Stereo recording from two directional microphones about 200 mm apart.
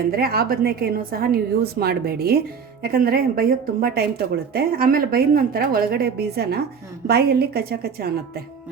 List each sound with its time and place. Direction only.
0.1 s a woman's voice: 50° right (ahead or behind)